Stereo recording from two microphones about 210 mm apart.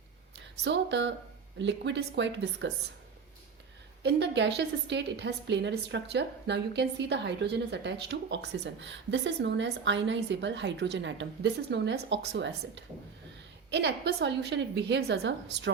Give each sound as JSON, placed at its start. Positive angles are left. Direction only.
{"t": 0.6, "sound": "a woman's voice", "side_deg": -60}
{"t": 4.0, "sound": "a woman's voice", "side_deg": -55}